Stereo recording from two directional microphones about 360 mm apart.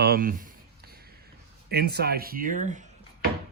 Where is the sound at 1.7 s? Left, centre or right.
Right.